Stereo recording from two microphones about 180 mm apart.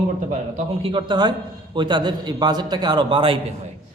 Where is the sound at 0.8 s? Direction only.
30° right (ahead or behind).